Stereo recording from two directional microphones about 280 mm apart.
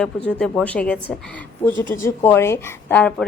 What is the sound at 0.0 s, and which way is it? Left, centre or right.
A woman's voice, centre.